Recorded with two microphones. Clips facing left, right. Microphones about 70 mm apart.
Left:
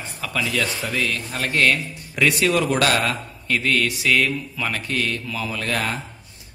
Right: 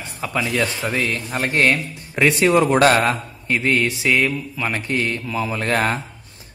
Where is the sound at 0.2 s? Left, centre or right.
Right.